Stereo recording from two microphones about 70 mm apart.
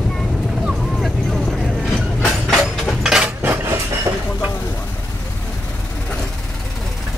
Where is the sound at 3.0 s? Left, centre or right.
Centre.